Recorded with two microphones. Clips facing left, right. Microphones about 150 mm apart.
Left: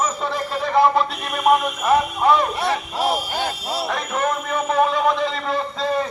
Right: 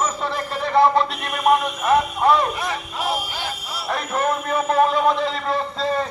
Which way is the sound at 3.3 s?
60° left (ahead or behind).